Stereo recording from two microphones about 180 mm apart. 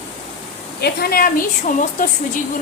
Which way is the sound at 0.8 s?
60° left (ahead or behind).